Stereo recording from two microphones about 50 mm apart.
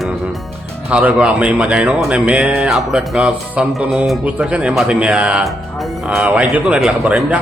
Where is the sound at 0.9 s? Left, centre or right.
Right.